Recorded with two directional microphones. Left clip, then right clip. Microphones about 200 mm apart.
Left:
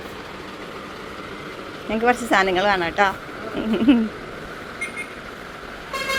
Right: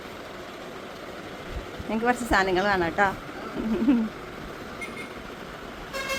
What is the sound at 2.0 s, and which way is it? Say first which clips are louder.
A woman's voice: left 5 dB; 5° right (ahead or behind).